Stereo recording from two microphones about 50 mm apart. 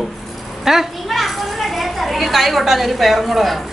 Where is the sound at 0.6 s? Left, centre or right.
Centre.